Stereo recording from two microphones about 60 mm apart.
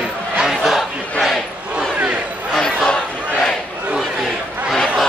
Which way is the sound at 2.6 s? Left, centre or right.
Centre.